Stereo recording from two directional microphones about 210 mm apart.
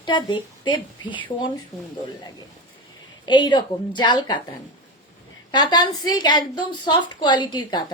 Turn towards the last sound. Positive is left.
turn(degrees=20)  # may be behind; listen again after turning